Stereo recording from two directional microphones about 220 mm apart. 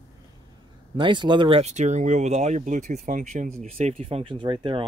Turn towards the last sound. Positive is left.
turn(degrees=-25)  # may be behind; listen again after turning